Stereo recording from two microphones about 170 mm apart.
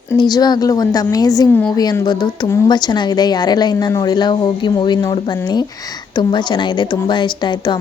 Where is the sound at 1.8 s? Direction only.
25° left (ahead or behind).